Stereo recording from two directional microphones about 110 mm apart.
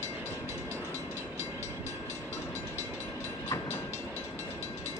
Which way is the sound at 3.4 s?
25° left (ahead or behind).